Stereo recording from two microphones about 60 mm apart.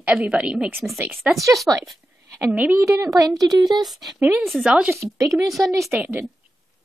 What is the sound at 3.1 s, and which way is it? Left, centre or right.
Speech, right.